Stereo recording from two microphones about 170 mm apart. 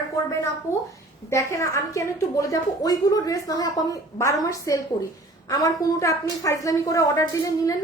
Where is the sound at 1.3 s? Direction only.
20° left (ahead or behind).